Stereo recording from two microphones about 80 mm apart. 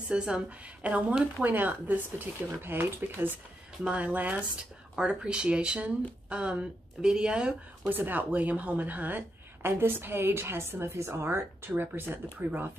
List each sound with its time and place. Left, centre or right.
0.1 s a woman's voice: centre
7.9 s a woman's voice: right